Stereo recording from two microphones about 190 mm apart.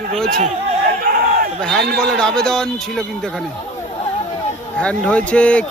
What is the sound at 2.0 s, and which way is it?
Speech, 5° left (ahead or behind).